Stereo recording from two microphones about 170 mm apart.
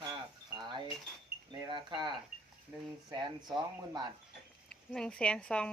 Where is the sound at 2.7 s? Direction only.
15° right (ahead or behind).